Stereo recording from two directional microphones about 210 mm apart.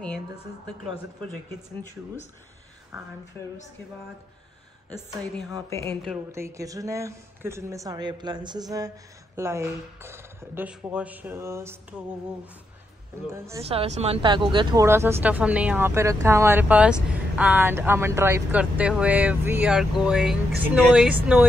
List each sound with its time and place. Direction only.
4.9 s a woman's voice: 5° left (ahead or behind)
6.3 s speech: 15° right (ahead or behind)
13.6 s speech: 30° right (ahead or behind); by 21.5 s 5° right (ahead or behind)